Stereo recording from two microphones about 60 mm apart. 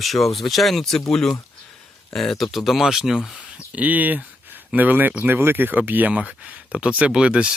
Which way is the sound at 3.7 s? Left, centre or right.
Right.